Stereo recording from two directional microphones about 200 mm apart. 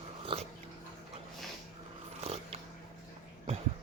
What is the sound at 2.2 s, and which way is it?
Dog, 30° right (ahead or behind).